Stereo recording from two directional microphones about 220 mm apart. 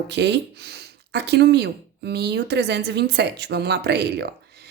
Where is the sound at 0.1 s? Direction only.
50° right (ahead or behind).